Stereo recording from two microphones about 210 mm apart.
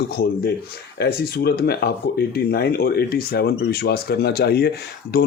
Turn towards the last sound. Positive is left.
turn(degrees=45)  # may be behind; listen again after turning